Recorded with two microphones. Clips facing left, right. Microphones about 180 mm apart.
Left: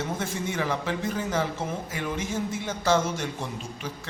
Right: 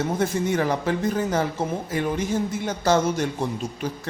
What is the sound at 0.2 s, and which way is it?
Speech, 40° right (ahead or behind).